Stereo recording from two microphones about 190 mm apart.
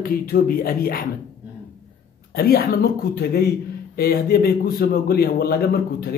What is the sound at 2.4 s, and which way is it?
Speech, 55° left (ahead or behind).